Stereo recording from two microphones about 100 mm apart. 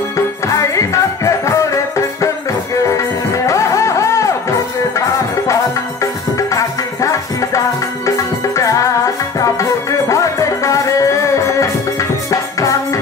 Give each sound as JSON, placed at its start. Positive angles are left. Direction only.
{"t": 0.7, "sound": "music", "side_deg": 30}
{"t": 6.3, "sound": "music", "side_deg": 30}